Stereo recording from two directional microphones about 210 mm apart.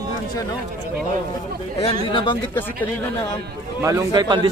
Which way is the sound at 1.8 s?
25° left (ahead or behind).